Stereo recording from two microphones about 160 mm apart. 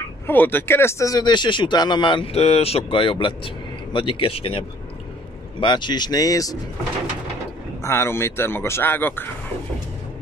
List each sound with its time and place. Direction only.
0.3 s speech: 15° left (ahead or behind); by 4.6 s 35° left (ahead or behind)
5.6 s speech: 30° left (ahead or behind)
7.8 s speech: 15° left (ahead or behind)